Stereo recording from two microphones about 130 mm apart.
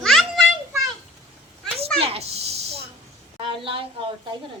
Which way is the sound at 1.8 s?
50° right (ahead or behind).